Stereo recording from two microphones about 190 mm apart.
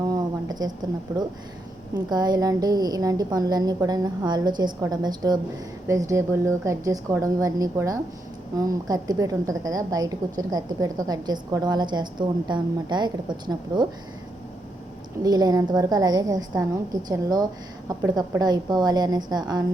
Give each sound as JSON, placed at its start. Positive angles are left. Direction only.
{"t": 0.0, "sound": "a sound", "side_deg": -20}
{"t": 2.0, "sound": "a woman's voice", "side_deg": -20}
{"t": 15.2, "sound": "a woman's voice", "side_deg": -20}